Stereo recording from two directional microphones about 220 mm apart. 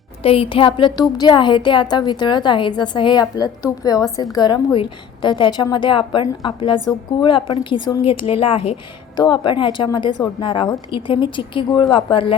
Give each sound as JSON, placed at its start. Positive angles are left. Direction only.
{"t": 0.2, "sound": "a woman's voice", "side_deg": 25}